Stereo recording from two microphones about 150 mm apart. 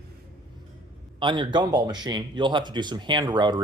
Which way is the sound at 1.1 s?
35° right (ahead or behind).